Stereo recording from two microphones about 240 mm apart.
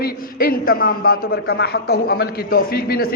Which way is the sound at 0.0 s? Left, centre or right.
Left.